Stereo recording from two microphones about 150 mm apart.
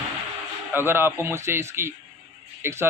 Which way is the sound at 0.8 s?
15° right (ahead or behind).